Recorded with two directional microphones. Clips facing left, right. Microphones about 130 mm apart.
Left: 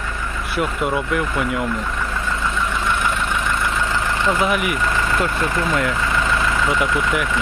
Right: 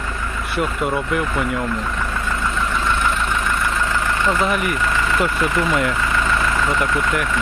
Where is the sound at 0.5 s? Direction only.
Centre (ahead or behind).